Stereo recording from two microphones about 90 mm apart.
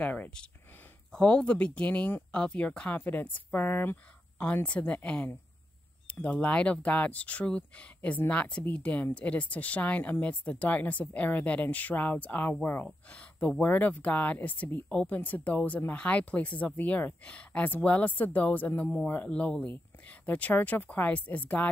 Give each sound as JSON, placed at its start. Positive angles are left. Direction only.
{"t": 0.0, "sound": "speech", "side_deg": 15}